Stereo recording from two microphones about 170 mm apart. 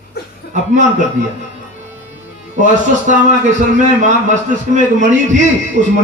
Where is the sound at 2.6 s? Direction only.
45° right (ahead or behind).